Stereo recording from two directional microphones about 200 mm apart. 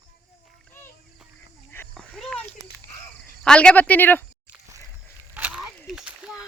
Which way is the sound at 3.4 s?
5° left (ahead or behind).